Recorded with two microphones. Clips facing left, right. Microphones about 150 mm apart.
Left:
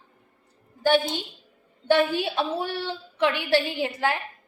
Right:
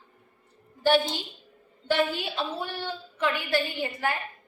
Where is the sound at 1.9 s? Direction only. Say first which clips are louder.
Left 5 dB; 75° left (ahead or behind).